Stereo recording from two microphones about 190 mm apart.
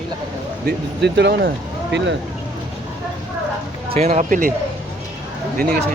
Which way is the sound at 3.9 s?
35° right (ahead or behind).